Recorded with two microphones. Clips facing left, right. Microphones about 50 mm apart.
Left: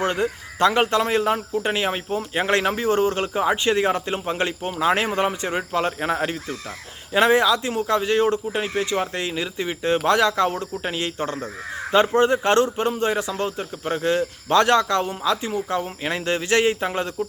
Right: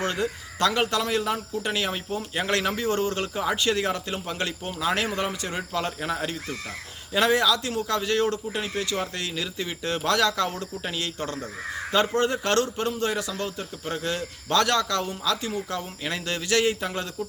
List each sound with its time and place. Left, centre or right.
0.0 s speech: left